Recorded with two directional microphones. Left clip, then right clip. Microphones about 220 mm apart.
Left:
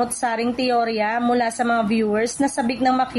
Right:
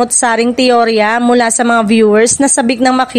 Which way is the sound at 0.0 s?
45° right (ahead or behind).